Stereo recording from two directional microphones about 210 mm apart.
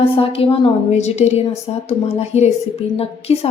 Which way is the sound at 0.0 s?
25° left (ahead or behind).